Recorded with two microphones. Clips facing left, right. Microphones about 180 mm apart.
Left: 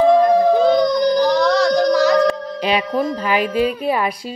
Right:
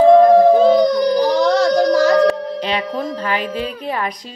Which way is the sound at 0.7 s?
5° right (ahead or behind).